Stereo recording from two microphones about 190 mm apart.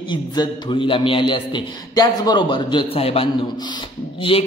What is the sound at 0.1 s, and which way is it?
A man's voice, 20° left (ahead or behind).